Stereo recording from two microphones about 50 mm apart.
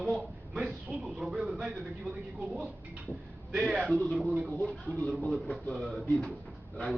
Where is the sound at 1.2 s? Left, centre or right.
Centre.